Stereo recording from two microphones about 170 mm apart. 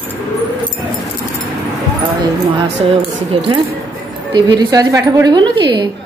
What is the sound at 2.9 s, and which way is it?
Speech, 35° right (ahead or behind).